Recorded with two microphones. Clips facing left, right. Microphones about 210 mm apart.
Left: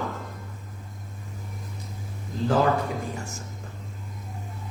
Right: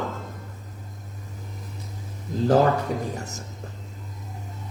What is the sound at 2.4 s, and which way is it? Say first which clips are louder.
Speech: right 3 dB; 40° right (ahead or behind).